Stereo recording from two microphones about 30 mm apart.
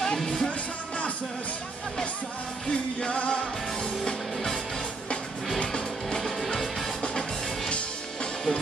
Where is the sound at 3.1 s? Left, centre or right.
Left.